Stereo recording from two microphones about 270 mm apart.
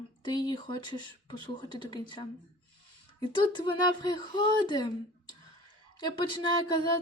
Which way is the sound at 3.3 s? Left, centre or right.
Centre.